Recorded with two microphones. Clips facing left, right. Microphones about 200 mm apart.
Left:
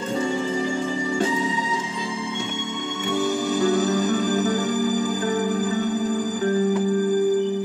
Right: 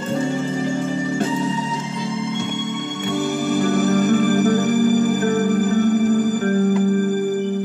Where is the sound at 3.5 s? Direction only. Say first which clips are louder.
Right 3 dB; 60° right (ahead or behind).